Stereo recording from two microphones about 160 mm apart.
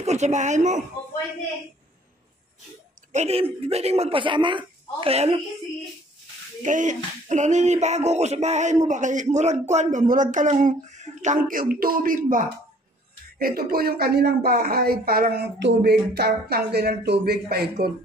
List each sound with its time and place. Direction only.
0.0 s speech: 45° right (ahead or behind)
3.1 s speech: 45° right (ahead or behind)
6.6 s speech: 50° right (ahead or behind)
13.4 s speech: 70° right (ahead or behind)